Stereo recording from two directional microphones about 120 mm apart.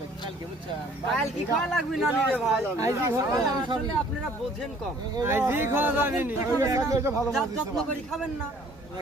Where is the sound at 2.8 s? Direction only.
25° right (ahead or behind).